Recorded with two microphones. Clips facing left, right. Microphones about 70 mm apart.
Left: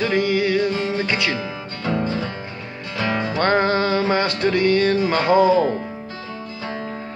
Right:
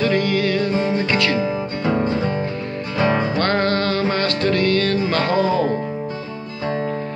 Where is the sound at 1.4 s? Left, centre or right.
Centre.